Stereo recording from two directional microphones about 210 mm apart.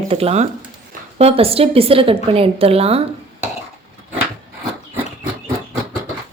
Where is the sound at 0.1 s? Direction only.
30° right (ahead or behind).